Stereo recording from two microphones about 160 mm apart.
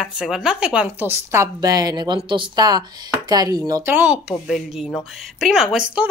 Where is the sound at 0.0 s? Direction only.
5° right (ahead or behind); by 3.9 s 25° right (ahead or behind).